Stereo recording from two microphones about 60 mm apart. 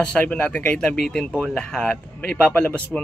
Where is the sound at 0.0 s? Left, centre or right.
Centre.